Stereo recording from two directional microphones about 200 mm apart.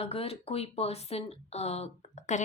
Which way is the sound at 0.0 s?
30° left (ahead or behind).